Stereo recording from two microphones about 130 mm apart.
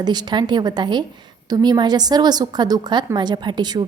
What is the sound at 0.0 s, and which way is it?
A woman's voice, 35° right (ahead or behind).